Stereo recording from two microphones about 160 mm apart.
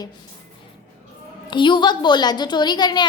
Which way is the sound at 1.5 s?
30° left (ahead or behind).